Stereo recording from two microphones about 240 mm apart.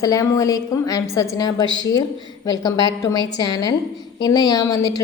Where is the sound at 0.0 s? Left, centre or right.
Centre.